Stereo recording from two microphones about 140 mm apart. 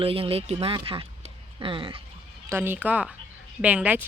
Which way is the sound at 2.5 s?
15° right (ahead or behind).